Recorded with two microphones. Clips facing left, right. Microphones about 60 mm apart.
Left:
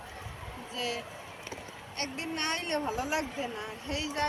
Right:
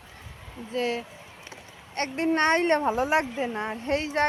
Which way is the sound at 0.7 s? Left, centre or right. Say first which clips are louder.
Right 8 dB; right.